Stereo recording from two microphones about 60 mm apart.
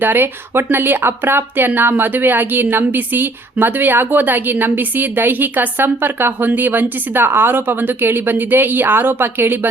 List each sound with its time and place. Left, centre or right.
0.0 s speech: right